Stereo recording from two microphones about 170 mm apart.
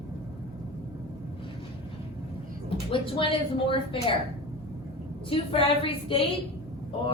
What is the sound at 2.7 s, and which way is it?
A woman's voice, 30° left (ahead or behind).